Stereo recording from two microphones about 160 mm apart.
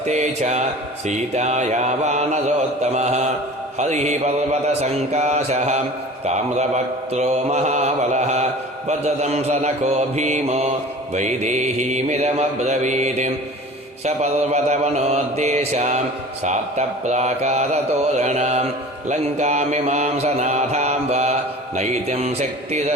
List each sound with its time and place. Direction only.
0.0 s mantra: 45° right (ahead or behind)